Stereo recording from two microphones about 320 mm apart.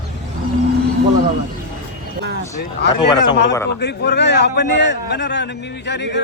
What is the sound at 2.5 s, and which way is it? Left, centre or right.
A man's voice, left.